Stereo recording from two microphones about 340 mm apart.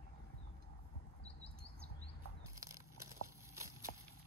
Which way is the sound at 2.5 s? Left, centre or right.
Centre.